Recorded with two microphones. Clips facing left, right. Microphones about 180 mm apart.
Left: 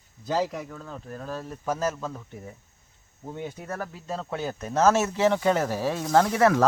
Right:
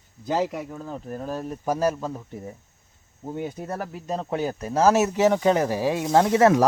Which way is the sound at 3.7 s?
15° right (ahead or behind).